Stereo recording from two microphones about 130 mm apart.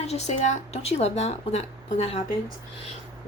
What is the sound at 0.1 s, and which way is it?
Speech, 60° left (ahead or behind).